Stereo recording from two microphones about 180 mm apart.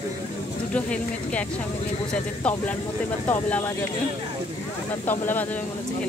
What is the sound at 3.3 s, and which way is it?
Speech, 10° left (ahead or behind).